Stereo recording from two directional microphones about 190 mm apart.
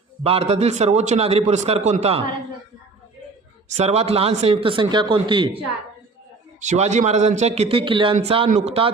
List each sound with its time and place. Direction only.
0.2 s a man's voice: 35° right (ahead or behind)
3.7 s speech: 35° right (ahead or behind)
6.6 s a man's voice: 35° right (ahead or behind)